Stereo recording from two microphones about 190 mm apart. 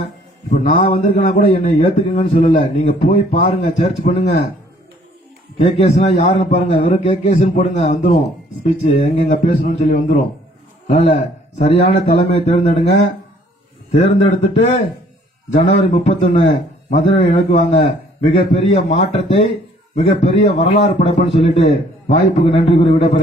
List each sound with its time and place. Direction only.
0.5 s a man's voice: 45° left (ahead or behind)
3.3 s a man's voice: 30° left (ahead or behind)
5.6 s a man's voice: 35° left (ahead or behind)
10.8 s a man's voice: 30° left (ahead or behind)
15.9 s a man's voice: 35° left (ahead or behind)